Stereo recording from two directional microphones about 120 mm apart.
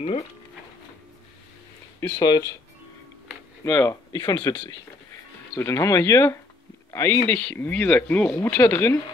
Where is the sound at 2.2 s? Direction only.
35° left (ahead or behind).